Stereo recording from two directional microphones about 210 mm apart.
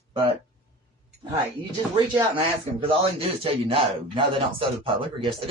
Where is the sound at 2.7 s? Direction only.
25° right (ahead or behind).